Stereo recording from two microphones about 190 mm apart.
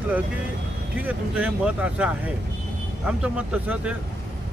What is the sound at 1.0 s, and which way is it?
Speech, 5° right (ahead or behind).